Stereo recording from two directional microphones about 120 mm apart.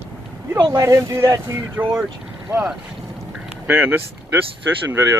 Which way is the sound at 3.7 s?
20° right (ahead or behind).